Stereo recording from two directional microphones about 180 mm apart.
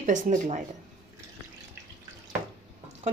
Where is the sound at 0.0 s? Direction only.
45° right (ahead or behind).